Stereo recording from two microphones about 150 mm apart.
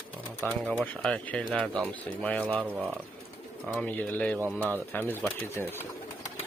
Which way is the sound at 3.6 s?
Centre (ahead or behind).